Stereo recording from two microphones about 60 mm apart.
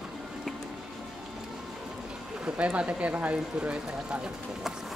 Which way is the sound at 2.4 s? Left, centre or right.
Centre.